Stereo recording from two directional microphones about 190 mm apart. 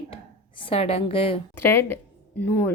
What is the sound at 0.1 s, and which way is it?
Speech, 30° left (ahead or behind).